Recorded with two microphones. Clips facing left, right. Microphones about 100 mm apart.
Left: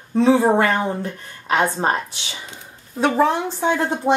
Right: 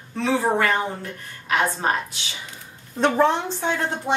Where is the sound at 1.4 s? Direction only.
30° left (ahead or behind).